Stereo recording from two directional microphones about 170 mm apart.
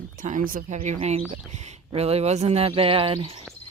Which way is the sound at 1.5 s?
40° right (ahead or behind).